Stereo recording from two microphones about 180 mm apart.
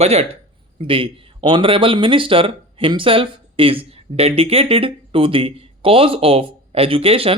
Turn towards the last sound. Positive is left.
turn(degrees=-30)  # may be behind; listen again after turning